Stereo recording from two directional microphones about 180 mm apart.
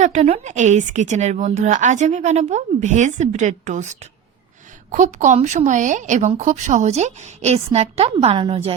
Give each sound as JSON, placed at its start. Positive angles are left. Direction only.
{"t": 0.0, "sound": "a woman's voice", "side_deg": -40}